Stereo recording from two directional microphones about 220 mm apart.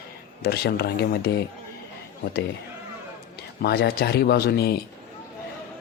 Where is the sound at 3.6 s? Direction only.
45° left (ahead or behind).